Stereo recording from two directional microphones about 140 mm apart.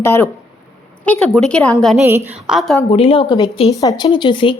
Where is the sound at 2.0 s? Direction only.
15° right (ahead or behind).